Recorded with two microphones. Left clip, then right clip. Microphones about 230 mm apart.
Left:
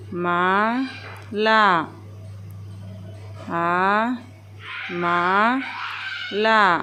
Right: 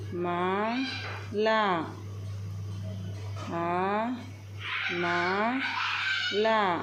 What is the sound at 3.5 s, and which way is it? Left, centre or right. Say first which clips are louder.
Speech: left 9 dB; left.